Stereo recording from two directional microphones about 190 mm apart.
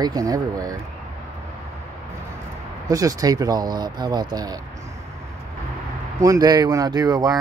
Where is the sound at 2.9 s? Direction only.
20° right (ahead or behind).